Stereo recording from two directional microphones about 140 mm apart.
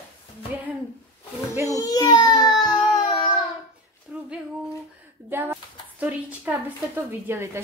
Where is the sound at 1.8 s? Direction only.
30° left (ahead or behind).